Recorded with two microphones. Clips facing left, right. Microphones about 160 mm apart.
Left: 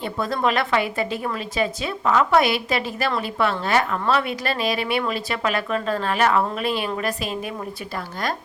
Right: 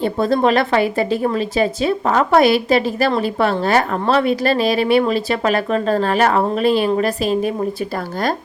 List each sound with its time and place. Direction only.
0.0 s a woman's voice: 30° right (ahead or behind)